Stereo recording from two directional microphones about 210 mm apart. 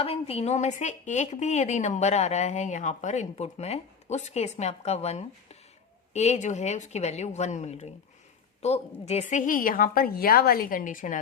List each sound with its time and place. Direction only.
0.0 s a woman's voice: 30° left (ahead or behind)